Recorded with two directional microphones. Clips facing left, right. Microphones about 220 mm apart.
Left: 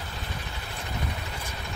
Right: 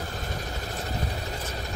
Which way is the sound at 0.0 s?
40° right (ahead or behind).